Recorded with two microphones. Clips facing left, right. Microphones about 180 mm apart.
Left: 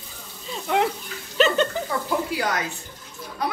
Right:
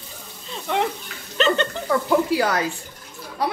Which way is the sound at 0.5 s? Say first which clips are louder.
Left 1 dB; centre (ahead or behind).